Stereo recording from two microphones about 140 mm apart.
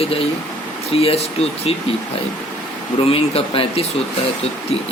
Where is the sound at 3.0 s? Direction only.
45° left (ahead or behind).